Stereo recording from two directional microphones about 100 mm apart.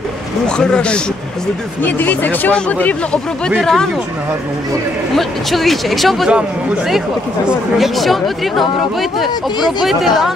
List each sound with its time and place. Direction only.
0.6 s speech: 10° left (ahead or behind)
5.1 s speech: centre (ahead or behind)
7.4 s speech: 5° right (ahead or behind)